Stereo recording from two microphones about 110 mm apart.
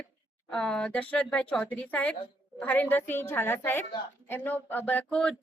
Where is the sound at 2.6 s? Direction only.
15° left (ahead or behind).